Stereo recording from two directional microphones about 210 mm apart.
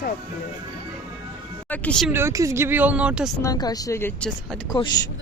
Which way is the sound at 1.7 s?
5° left (ahead or behind).